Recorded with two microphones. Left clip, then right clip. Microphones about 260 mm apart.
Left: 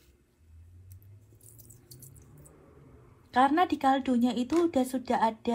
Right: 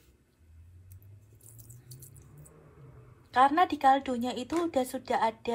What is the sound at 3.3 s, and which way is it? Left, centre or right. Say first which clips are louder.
Speech: right 1 dB; centre.